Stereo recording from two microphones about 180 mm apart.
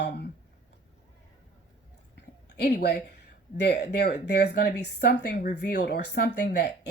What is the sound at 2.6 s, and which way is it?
Speech, 70° left (ahead or behind).